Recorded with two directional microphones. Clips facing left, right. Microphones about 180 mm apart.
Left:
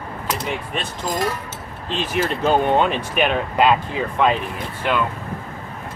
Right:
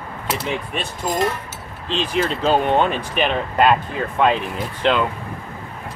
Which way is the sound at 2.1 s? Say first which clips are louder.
Even; 10° left (ahead or behind).